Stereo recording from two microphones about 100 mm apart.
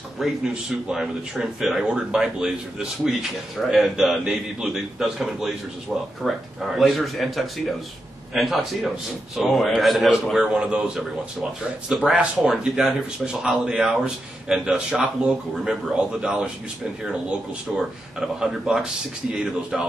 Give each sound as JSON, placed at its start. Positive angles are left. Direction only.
{"t": 0.2, "sound": "a man's voice", "side_deg": -5}